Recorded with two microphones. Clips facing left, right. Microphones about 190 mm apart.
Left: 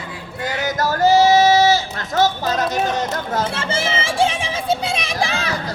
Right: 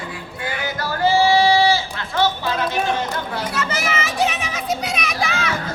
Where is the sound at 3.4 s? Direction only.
25° left (ahead or behind).